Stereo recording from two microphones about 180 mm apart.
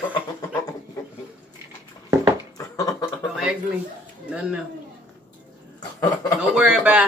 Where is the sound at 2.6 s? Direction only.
20° left (ahead or behind).